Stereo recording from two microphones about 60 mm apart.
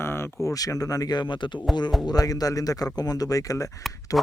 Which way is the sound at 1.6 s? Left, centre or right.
Centre.